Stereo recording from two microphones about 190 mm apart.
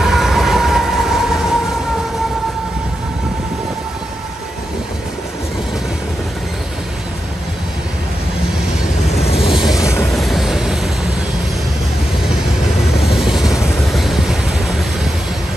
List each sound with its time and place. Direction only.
0.0 s train: centre (ahead or behind)
9.1 s vehicle: 30° left (ahead or behind)
9.6 s vehicle: 5° right (ahead or behind)
13.0 s vehicle: centre (ahead or behind)